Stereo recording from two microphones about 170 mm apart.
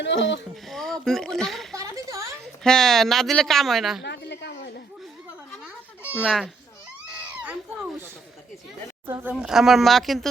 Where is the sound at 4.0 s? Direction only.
90° left.